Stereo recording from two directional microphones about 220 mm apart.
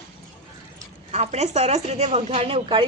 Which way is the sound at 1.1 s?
30° right (ahead or behind).